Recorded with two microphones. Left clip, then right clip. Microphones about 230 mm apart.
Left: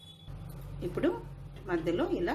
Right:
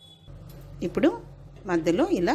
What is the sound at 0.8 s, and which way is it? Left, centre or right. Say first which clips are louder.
A woman's voice: right 7 dB; right.